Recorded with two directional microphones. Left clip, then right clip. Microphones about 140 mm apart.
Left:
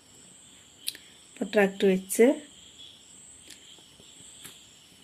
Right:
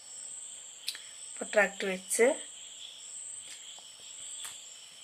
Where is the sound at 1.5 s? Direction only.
20° right (ahead or behind).